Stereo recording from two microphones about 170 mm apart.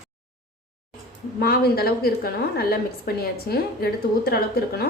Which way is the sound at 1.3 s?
65° left (ahead or behind).